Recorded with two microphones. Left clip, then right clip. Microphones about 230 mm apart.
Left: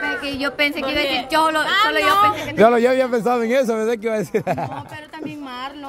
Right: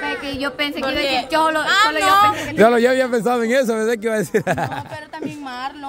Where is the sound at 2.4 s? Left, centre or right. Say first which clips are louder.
Even; centre.